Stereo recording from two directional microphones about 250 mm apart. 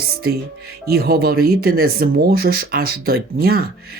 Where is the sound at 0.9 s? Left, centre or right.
Right.